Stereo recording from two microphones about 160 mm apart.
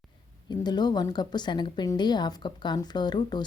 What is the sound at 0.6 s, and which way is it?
A woman's voice, 25° left (ahead or behind).